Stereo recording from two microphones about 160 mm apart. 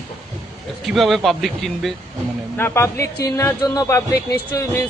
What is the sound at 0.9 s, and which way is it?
A man's voice, centre (ahead or behind).